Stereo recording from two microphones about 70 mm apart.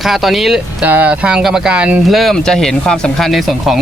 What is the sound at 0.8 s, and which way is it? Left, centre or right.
Speech, right.